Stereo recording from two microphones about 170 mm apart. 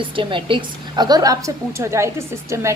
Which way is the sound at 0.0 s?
30° right (ahead or behind).